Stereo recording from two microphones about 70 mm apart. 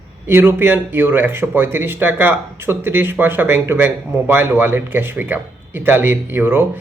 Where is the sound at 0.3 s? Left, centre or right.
Right.